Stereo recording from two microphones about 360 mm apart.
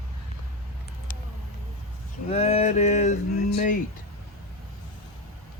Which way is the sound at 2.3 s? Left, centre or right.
Centre.